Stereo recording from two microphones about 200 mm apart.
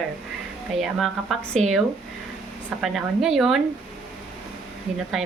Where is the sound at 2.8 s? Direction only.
Centre (ahead or behind).